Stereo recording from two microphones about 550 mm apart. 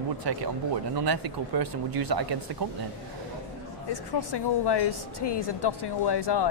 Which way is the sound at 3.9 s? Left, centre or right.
Left.